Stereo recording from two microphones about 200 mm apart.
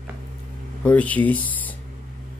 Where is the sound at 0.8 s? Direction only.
5° left (ahead or behind).